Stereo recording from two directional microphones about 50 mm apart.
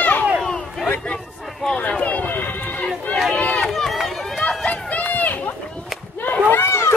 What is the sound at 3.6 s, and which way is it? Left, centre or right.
Run, centre.